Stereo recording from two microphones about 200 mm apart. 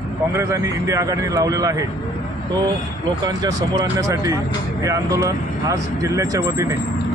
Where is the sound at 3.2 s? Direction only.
20° right (ahead or behind).